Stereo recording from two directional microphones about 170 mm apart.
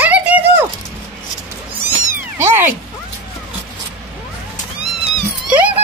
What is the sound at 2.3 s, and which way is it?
Cat, 15° right (ahead or behind).